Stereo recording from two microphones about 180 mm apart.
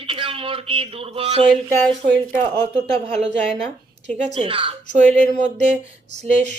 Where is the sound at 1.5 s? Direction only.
Centre (ahead or behind).